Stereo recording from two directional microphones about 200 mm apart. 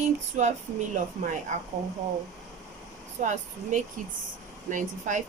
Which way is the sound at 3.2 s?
35° right (ahead or behind).